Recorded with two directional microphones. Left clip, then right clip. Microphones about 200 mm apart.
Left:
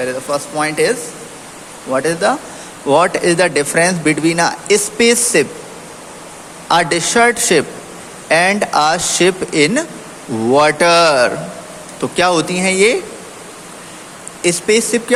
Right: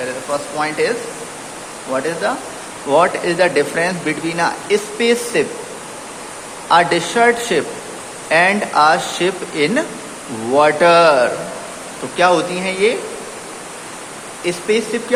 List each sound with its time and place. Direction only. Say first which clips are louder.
0.0 s speech: left 3 dB; 45° left (ahead or behind)
6.7 s speech: even; 40° left (ahead or behind)
14.4 s speech: left 4 dB; 45° left (ahead or behind)